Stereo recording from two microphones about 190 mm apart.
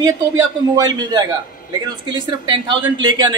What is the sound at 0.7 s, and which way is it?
A man's voice, 20° right (ahead or behind).